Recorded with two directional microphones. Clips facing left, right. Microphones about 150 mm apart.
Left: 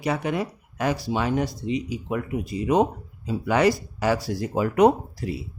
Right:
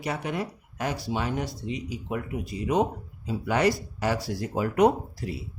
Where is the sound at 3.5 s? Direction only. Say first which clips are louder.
Left 4 dB; 90° left.